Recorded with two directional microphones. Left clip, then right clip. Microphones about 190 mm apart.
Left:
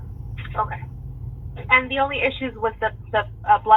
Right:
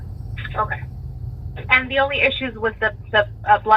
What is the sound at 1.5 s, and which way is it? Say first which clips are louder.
A woman's voice: right 1 dB; 55° right (ahead or behind).